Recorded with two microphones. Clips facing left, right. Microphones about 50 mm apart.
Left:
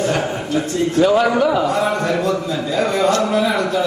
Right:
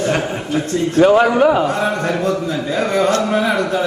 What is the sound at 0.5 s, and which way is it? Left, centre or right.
A man's voice, right.